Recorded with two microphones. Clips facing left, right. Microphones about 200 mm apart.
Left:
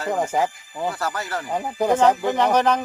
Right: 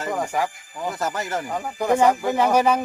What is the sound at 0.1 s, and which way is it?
Speech, 20° left (ahead or behind).